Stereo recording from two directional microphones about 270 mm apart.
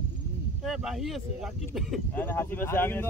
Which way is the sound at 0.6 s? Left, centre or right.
Centre.